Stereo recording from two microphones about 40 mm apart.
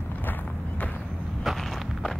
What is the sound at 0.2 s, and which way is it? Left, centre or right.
Run, left.